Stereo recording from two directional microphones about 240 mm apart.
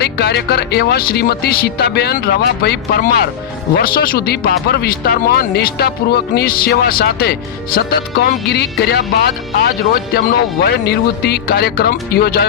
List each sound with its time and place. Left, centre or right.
0.0 s speech: left